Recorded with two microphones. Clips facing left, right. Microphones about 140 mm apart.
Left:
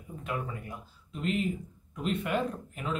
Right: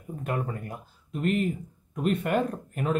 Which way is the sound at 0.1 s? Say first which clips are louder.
Right 5 dB; 50° right (ahead or behind).